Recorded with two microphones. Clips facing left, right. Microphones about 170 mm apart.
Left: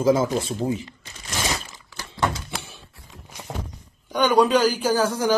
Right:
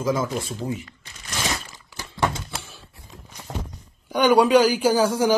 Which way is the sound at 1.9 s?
15° right (ahead or behind).